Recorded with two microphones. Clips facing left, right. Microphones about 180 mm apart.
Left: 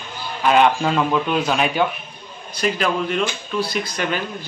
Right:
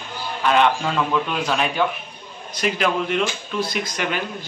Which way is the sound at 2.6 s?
10° right (ahead or behind).